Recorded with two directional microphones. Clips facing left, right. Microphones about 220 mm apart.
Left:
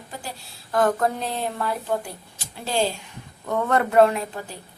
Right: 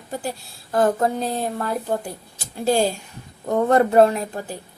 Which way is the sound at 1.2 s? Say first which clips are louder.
Right 2 dB; 45° right (ahead or behind).